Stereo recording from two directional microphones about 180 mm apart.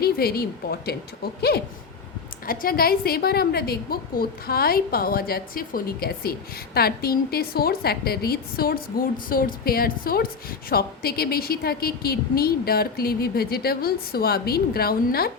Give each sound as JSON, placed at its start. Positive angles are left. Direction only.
{"t": 0.0, "sound": "a woman's voice", "side_deg": 60}